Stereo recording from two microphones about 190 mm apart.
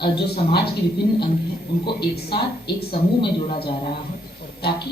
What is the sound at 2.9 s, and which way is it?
Speech, 25° left (ahead or behind).